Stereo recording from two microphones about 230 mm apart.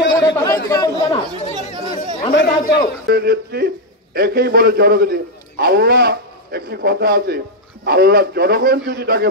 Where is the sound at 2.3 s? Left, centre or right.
Left.